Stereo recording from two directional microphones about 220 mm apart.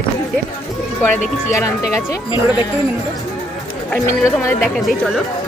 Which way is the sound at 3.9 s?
15° left (ahead or behind).